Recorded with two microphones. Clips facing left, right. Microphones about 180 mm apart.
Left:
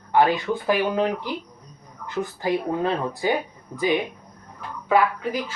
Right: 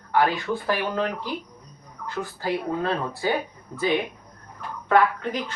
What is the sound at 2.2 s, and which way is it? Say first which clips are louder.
A man's voice: left 3 dB; 20° left (ahead or behind).